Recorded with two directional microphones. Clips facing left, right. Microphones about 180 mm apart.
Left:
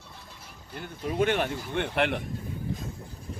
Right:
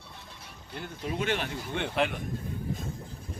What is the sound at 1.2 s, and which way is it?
Speech, 50° left (ahead or behind).